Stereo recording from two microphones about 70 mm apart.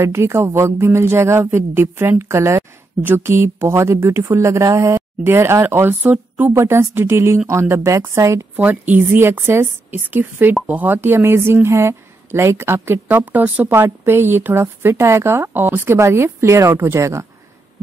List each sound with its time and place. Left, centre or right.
0.0 s a woman's voice: right
3.0 s a woman's voice: right
3.3 s a woman's voice: right
6.5 s a woman's voice: right
8.5 s a woman's voice: right
13.2 s a woman's voice: right
13.7 s a woman's voice: right